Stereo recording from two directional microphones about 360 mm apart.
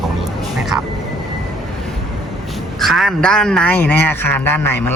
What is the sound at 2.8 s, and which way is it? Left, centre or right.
A man's voice, centre.